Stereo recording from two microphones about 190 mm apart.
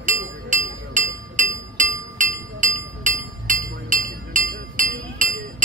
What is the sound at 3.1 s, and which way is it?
Chink, 40° right (ahead or behind).